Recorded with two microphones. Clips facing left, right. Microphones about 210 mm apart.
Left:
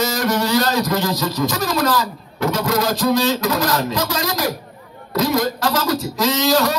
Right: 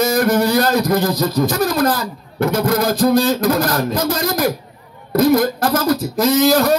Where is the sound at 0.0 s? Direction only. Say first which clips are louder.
Right 5 dB; 55° right (ahead or behind).